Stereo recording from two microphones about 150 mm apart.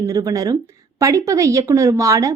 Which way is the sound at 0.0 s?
20° right (ahead or behind).